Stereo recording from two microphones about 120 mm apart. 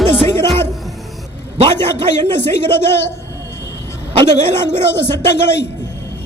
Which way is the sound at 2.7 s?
20° left (ahead or behind).